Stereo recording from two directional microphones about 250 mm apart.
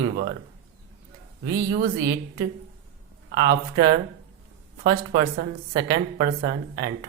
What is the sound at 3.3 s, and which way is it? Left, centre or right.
Speech, right.